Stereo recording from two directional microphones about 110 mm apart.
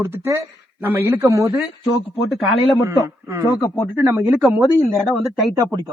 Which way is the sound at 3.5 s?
30° left (ahead or behind).